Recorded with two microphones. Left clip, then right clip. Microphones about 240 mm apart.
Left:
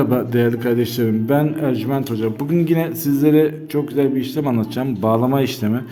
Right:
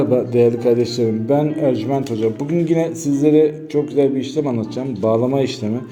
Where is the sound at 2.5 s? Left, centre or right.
Left.